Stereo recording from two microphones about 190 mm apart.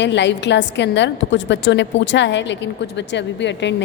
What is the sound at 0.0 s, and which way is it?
A woman's voice, 70° left (ahead or behind).